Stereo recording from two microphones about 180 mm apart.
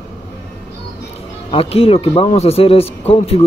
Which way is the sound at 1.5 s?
30° left (ahead or behind).